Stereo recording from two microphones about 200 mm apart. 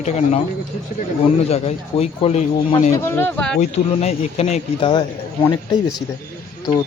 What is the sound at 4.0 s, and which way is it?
Speech, 35° left (ahead or behind).